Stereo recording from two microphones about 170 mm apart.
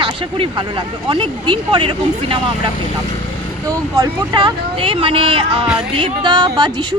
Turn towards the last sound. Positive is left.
turn(degrees=-25)  # may be behind; listen again after turning